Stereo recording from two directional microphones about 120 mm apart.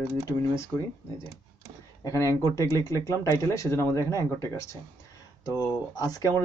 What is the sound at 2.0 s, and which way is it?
Speech, 25° left (ahead or behind).